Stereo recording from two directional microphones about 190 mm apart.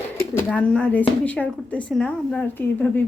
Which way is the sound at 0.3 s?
5° left (ahead or behind).